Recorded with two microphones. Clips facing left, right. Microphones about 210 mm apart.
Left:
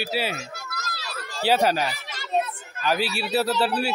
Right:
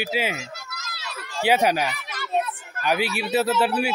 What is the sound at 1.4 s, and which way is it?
Speech, 15° right (ahead or behind).